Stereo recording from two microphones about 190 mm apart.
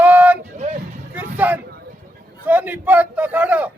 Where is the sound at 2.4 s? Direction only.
10° right (ahead or behind).